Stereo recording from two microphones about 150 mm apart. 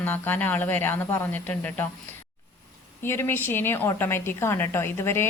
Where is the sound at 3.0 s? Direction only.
15° left (ahead or behind).